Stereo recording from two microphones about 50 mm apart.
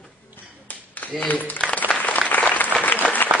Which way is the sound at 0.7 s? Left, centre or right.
Left.